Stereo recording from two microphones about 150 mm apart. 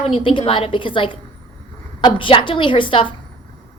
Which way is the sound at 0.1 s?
35° left (ahead or behind).